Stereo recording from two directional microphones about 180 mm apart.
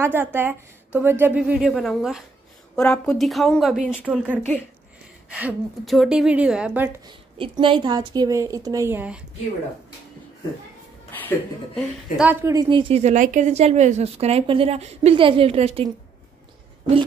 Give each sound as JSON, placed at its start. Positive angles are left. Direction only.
{"t": 0.0, "sound": "a woman's voice", "side_deg": -10}
{"t": 5.3, "sound": "a woman's voice", "side_deg": -5}
{"t": 7.3, "sound": "a woman's voice", "side_deg": -30}
{"t": 11.1, "sound": "speech", "side_deg": 10}
{"t": 12.2, "sound": "a woman's voice", "side_deg": -10}
{"t": 12.5, "sound": "a woman's voice", "side_deg": -25}